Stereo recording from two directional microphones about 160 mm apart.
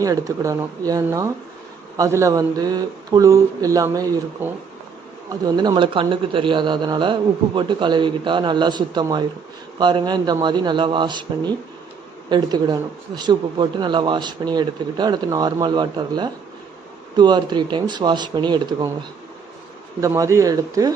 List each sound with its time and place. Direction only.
0.0 s speech: 20° right (ahead or behind)
5.5 s speech: 25° right (ahead or behind)
20.0 s speech: 20° right (ahead or behind)